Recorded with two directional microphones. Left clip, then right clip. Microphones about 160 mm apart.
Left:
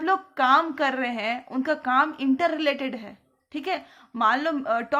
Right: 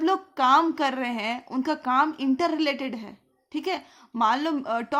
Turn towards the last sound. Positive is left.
turn(degrees=-40)  # may be behind; listen again after turning